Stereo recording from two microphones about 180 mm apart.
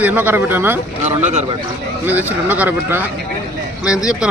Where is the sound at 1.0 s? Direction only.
40° right (ahead or behind).